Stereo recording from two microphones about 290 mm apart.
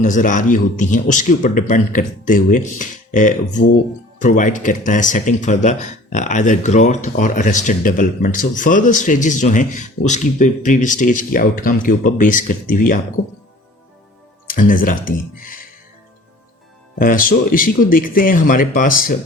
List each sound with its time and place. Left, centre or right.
0.0 s speech: left
14.4 s speech: left
17.0 s speech: left